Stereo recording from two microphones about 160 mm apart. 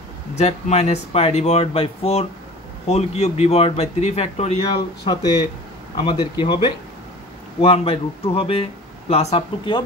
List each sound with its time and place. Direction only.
0.4 s speech: 45° left (ahead or behind)
5.0 s speech: 25° left (ahead or behind)